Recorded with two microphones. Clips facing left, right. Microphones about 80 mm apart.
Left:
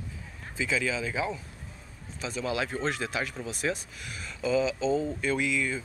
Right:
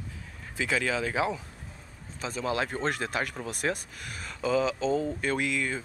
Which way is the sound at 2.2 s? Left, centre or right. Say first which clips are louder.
Right 1 dB; right.